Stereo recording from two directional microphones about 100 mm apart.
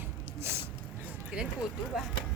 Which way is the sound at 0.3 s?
25° right (ahead or behind).